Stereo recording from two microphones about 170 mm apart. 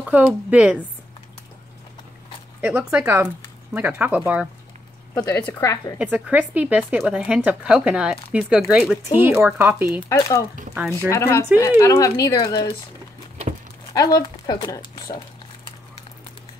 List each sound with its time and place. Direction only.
0.1 s speech: 10° right (ahead or behind)
2.6 s speech: 5° right (ahead or behind)
5.1 s a woman's voice: 10° left (ahead or behind)
5.9 s speech: 10° right (ahead or behind)
10.0 s a woman's voice: 15° left (ahead or behind)
13.9 s a woman's voice: 20° left (ahead or behind)